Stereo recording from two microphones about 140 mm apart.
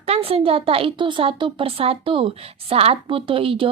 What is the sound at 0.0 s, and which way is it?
A woman's voice, 45° right (ahead or behind).